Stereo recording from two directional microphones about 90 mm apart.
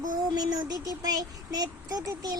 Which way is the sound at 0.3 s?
45° right (ahead or behind).